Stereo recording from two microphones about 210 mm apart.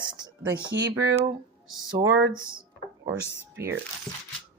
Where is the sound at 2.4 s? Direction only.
20° right (ahead or behind).